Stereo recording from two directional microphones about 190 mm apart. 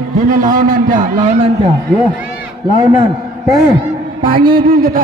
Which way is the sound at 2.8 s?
20° right (ahead or behind).